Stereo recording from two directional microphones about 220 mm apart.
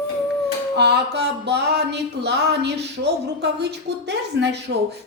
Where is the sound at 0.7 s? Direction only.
50° right (ahead or behind).